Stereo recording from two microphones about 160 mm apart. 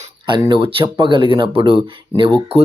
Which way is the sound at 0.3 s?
25° right (ahead or behind).